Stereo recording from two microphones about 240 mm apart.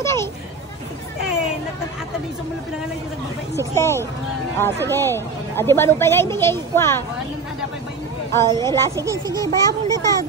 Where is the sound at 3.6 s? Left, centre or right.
Centre.